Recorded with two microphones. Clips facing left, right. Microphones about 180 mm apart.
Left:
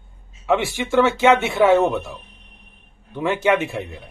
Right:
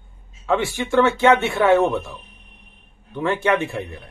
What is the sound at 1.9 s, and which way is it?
Speech, 15° left (ahead or behind).